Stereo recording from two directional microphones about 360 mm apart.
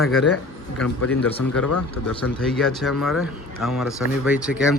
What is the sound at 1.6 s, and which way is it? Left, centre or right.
Speech, left.